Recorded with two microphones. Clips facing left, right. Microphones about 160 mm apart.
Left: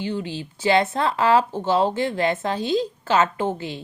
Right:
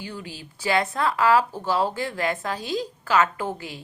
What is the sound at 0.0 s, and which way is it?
A woman's voice, 25° left (ahead or behind).